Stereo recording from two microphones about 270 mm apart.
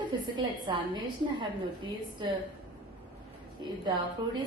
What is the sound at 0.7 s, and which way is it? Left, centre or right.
A woman's voice, centre.